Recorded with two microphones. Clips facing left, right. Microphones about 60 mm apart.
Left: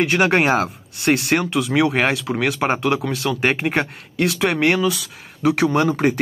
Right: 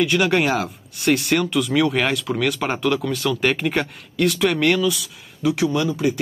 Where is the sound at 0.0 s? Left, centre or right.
Left.